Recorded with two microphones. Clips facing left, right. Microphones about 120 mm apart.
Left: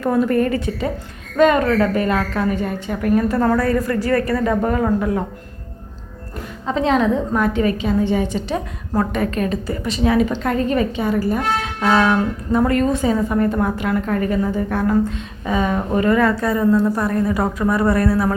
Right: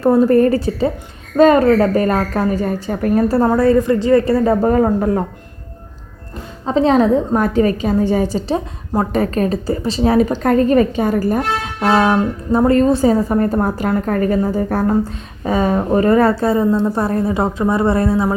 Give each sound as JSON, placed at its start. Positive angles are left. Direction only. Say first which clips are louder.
{"t": 0.0, "sound": "a woman's voice", "louder": "right 6 dB", "side_deg": -35}
{"t": 3.4, "sound": "speech", "louder": "right 5 dB", "side_deg": -25}
{"t": 6.7, "sound": "a woman's voice", "louder": "right 4 dB", "side_deg": -35}